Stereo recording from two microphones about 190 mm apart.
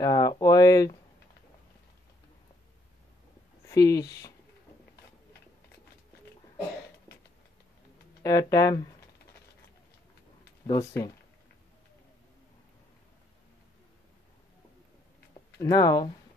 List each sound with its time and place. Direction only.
0.0 s speech: 20° left (ahead or behind)
3.6 s speech: 20° left (ahead or behind)
8.2 s speech: 20° left (ahead or behind)
10.7 s speech: 15° left (ahead or behind)
15.5 s speech: 20° left (ahead or behind)